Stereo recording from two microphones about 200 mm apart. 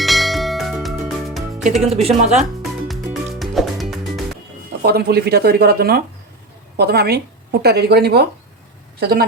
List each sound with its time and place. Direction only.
0.0 s a sound: centre (ahead or behind)
1.8 s speech: 30° right (ahead or behind)
2.4 s music: centre (ahead or behind)
4.8 s a woman's voice: 50° right (ahead or behind)